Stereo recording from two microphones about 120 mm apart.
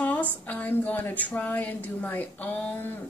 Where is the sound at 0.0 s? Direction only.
10° left (ahead or behind).